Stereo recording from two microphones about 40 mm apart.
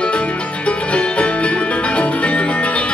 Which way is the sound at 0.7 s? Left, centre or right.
Left.